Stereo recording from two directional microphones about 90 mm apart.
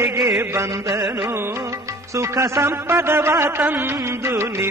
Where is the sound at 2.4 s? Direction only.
30° right (ahead or behind).